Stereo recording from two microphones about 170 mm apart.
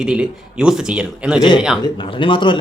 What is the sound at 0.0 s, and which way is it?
A man's voice, 5° right (ahead or behind).